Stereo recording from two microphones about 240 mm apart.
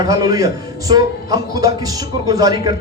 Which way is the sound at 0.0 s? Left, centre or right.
Centre.